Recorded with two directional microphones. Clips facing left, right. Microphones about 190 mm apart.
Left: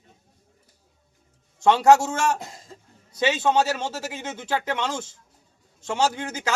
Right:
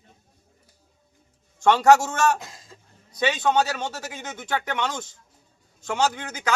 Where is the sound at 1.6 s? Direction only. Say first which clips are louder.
Even; 25° left (ahead or behind).